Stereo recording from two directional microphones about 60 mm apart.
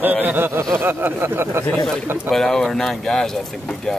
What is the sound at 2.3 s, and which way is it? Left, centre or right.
Speech, centre.